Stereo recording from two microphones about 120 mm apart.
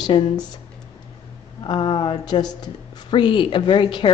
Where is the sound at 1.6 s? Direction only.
45° left (ahead or behind).